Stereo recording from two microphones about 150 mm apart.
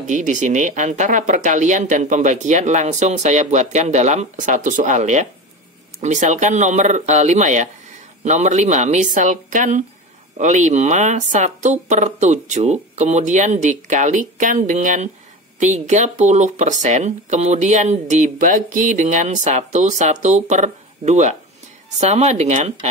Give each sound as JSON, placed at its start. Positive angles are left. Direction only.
{"t": 0.0, "sound": "speech", "side_deg": -55}